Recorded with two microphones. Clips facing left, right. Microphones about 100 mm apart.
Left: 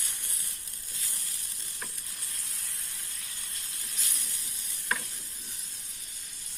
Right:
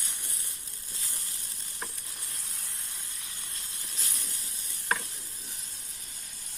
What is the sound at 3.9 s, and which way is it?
Hiss, 35° right (ahead or behind).